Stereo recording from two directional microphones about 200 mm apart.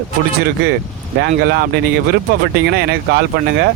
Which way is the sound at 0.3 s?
55° right (ahead or behind).